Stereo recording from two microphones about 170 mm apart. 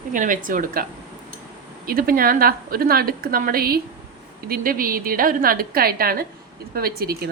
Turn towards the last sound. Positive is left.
turn(degrees=-65)  # may be behind; listen again after turning